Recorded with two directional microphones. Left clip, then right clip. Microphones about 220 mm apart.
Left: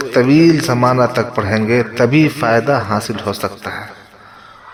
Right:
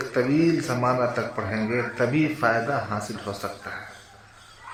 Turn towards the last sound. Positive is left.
turn(degrees=45)  # may be behind; listen again after turning